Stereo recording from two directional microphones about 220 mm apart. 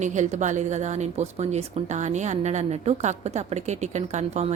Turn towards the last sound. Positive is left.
turn(degrees=-30)  # may be behind; listen again after turning